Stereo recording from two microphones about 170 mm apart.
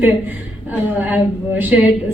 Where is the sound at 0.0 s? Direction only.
10° right (ahead or behind).